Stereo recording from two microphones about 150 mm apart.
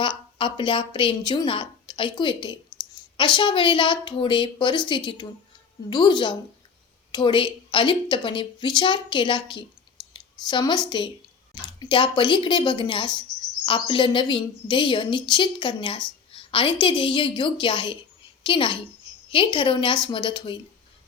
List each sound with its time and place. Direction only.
0.0 s a woman's voice: 35° left (ahead or behind)